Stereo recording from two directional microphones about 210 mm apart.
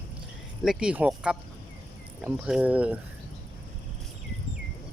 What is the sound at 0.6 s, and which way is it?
Speech, 5° right (ahead or behind).